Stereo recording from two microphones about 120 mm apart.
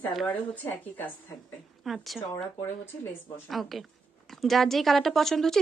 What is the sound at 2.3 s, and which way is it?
Speech, 25° left (ahead or behind).